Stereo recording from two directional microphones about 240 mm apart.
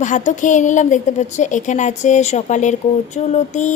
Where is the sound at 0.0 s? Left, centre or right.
Left.